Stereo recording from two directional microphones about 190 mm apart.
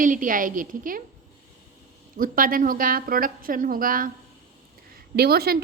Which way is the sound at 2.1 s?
45° right (ahead or behind).